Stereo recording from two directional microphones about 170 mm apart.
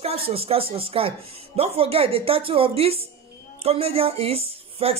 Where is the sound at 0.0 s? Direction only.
35° right (ahead or behind).